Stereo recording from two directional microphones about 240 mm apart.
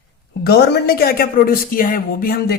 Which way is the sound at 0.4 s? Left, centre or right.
Left.